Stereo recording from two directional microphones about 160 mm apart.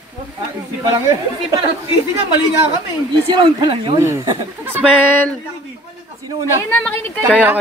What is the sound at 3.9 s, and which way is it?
Speech, 20° right (ahead or behind).